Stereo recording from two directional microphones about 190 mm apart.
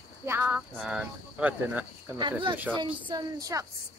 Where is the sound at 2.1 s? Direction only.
25° right (ahead or behind).